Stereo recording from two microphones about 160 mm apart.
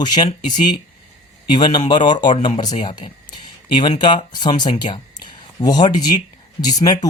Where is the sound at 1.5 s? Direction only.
30° left (ahead or behind).